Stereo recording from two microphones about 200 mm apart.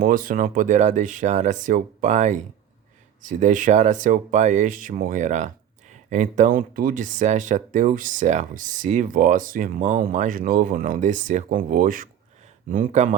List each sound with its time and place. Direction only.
0.0 s speech: 45° right (ahead or behind)